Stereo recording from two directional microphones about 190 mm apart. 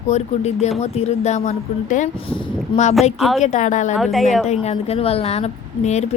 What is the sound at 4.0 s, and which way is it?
Speech, centre (ahead or behind).